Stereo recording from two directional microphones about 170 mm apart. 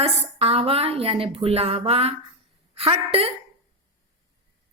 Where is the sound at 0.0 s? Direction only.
35° right (ahead or behind).